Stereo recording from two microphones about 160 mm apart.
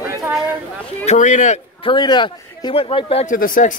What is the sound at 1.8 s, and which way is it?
A man's voice, 30° left (ahead or behind).